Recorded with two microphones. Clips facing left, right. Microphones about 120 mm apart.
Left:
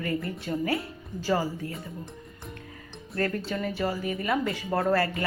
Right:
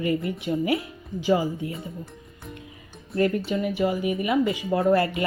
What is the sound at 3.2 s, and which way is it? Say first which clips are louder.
Speech: right 5 dB; 15° right (ahead or behind).